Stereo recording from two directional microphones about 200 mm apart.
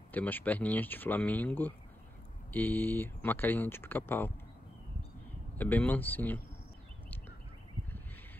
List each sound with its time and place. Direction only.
0.1 s speech: 10° left (ahead or behind)
5.6 s speech: 10° left (ahead or behind)